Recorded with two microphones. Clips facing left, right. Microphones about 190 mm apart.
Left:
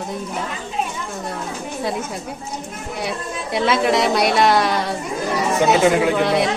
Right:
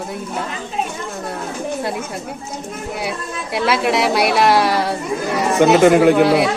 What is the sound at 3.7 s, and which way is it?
Speech, 5° right (ahead or behind).